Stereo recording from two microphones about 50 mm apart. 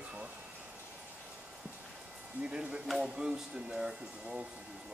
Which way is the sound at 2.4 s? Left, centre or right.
Centre.